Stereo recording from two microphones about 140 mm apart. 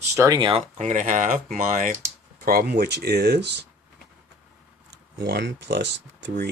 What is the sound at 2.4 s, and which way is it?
Speech, 90° right.